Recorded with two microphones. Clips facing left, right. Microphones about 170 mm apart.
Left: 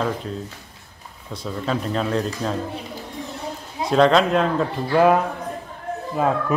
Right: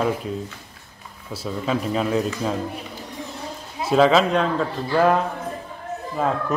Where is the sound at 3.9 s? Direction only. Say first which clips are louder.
Even; 5° right (ahead or behind).